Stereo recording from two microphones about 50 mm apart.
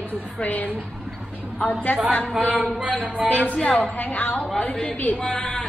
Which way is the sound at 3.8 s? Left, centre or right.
Left.